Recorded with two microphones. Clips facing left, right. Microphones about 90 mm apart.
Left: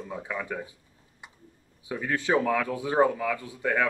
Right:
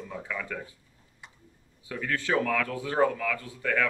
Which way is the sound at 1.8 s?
20° left (ahead or behind).